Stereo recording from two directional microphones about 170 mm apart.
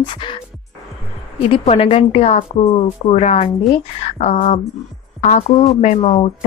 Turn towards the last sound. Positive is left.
turn(degrees=40)  # may be behind; listen again after turning